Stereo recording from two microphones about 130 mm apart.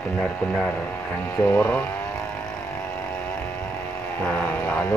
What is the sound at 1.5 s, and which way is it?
Speech, 10° left (ahead or behind).